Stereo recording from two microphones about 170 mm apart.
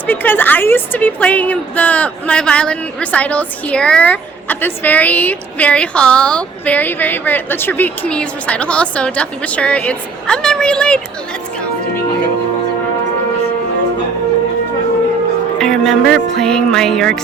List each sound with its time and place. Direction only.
0.1 s a woman's voice: 10° left (ahead or behind)
15.5 s speech: 5° left (ahead or behind)